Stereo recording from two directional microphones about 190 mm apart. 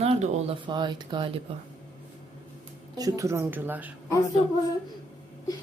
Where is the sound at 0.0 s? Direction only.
35° right (ahead or behind).